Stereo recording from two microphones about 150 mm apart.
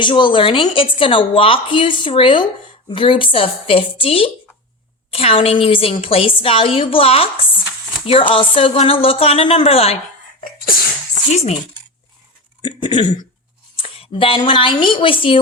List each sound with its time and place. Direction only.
0.0 s a woman's voice: 30° left (ahead or behind)
11.3 s speech: 50° left (ahead or behind)
12.6 s a woman's voice: 35° left (ahead or behind)